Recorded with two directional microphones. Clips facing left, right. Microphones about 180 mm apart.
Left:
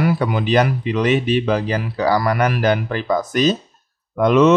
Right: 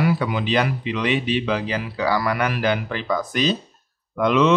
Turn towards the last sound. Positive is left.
turn(degrees=45)  # may be behind; listen again after turning